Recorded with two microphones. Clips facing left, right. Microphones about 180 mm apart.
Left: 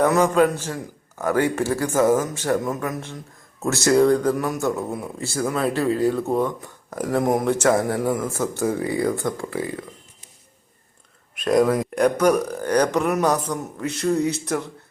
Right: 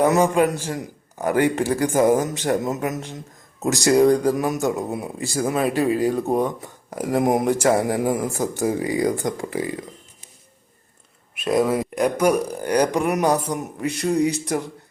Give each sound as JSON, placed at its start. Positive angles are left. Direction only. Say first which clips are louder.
{"t": 0.0, "sound": "a man's voice", "louder": "even", "side_deg": -15}
{"t": 11.3, "sound": "a man's voice", "louder": "left 2 dB", "side_deg": -5}